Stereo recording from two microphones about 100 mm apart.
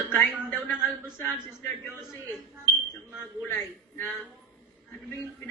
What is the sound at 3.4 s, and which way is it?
Speech, 25° left (ahead or behind).